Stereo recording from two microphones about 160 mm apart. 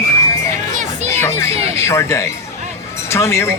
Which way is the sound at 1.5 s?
40° right (ahead or behind).